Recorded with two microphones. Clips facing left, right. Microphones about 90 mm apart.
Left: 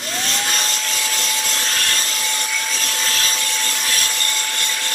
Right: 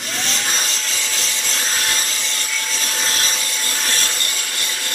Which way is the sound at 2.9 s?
25° right (ahead or behind).